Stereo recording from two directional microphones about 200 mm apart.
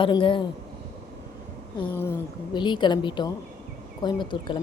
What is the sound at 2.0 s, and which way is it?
Speech, 15° left (ahead or behind).